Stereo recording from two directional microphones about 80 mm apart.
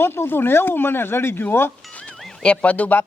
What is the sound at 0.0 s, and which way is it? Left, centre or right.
Speech, left.